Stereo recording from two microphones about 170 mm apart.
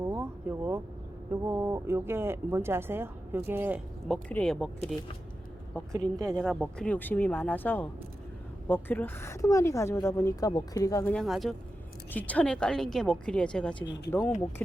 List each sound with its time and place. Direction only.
0.0 s vehicle: 15° right (ahead or behind)
1.3 s speech: 15° right (ahead or behind)
4.1 s speech: 5° left (ahead or behind)
5.9 s a woman's voice: 20° right (ahead or behind)
6.2 s a woman's voice: 5° left (ahead or behind); by 11.1 s 20° left (ahead or behind)
11.1 s a woman's voice: centre (ahead or behind)